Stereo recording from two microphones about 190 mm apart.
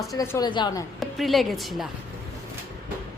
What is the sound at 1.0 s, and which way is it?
Speech, centre (ahead or behind).